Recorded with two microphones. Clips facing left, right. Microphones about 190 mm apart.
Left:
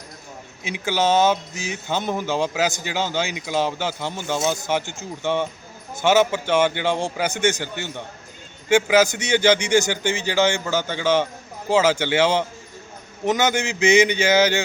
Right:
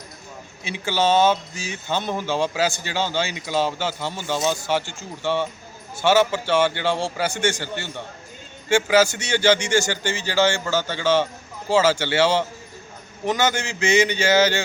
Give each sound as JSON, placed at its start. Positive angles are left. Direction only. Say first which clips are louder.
{"t": 0.6, "sound": "a man's voice", "louder": "even", "side_deg": 15}